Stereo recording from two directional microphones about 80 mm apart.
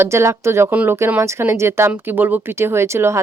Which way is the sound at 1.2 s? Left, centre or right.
Right.